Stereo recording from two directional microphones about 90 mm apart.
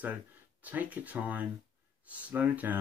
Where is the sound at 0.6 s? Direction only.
15° right (ahead or behind).